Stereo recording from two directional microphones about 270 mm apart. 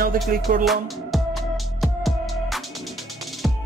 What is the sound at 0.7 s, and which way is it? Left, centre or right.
Music, centre.